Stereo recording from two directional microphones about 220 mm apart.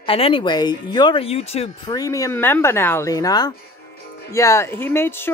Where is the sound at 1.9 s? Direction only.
15° left (ahead or behind).